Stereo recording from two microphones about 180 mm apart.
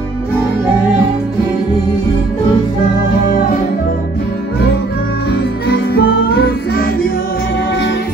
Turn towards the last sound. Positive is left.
turn(degrees=60)  # may be behind; listen again after turning